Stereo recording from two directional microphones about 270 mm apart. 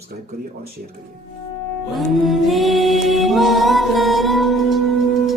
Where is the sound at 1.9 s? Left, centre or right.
Centre.